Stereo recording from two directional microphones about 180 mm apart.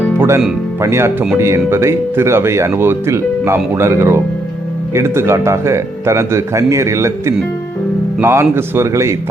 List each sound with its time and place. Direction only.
0.2 s music: 15° right (ahead or behind)
0.8 s speech: 15° right (ahead or behind)